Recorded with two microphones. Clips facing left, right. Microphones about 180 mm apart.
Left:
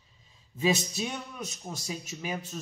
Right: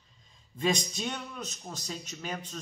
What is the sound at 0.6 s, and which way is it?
A man's voice, 5° left (ahead or behind).